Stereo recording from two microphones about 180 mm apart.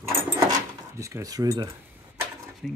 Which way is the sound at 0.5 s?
15° right (ahead or behind).